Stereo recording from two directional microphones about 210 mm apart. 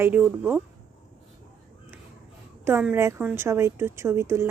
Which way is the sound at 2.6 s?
10° right (ahead or behind).